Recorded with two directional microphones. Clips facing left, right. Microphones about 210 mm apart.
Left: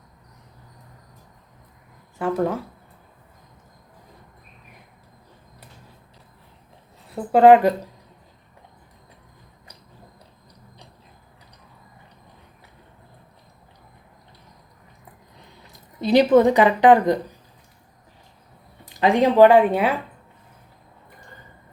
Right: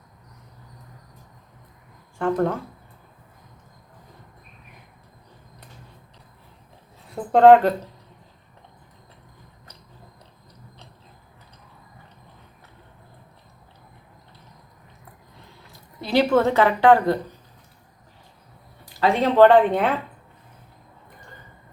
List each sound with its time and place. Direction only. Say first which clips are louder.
2.1 s speech: even; 5° left (ahead or behind)
7.1 s speech: even; 5° left (ahead or behind)
15.7 s speech: left 4 dB; 20° left (ahead or behind)
18.9 s speech: left 2 dB; 15° left (ahead or behind)